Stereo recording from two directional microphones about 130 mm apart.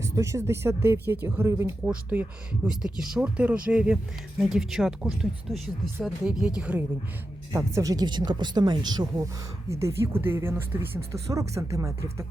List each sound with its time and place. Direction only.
0.0 s speech: 25° right (ahead or behind)
7.5 s speech: 25° right (ahead or behind)